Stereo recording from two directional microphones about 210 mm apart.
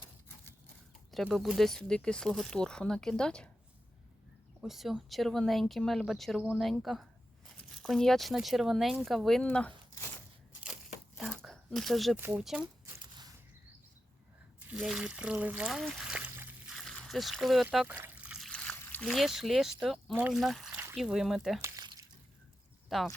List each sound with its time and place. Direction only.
1.1 s speech: centre (ahead or behind)
4.6 s speech: centre (ahead or behind)
11.2 s a sound: centre (ahead or behind)
12.2 s speech: 5° right (ahead or behind)
12.8 s a sound: 15° right (ahead or behind)
14.6 s a sound: 5° right (ahead or behind)
19.8 s speech: centre (ahead or behind)
21.6 s crumpling: 15° right (ahead or behind)
22.9 s speech: centre (ahead or behind)